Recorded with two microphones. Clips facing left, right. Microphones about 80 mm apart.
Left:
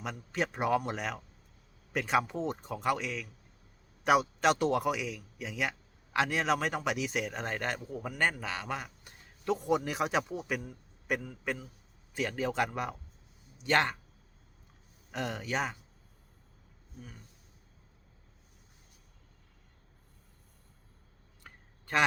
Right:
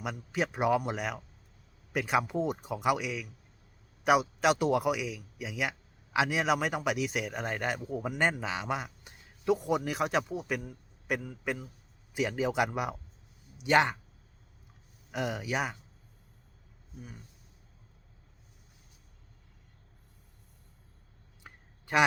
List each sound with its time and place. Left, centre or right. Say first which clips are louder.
0.0 s a man's voice: right 1 dB; centre
9.4 s a man's voice: right 1 dB; centre
15.1 s a man's voice: right 2 dB; centre
21.4 s a sound: right 1 dB; centre